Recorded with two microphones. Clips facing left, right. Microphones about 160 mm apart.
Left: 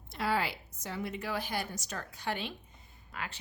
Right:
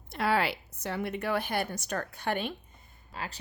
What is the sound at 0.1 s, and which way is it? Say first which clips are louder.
A woman's voice: right 4 dB; 65° right (ahead or behind).